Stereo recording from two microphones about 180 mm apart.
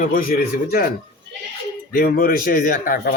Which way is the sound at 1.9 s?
55° left (ahead or behind).